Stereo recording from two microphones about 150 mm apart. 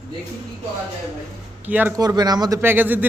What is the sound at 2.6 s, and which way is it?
Speech, 15° right (ahead or behind).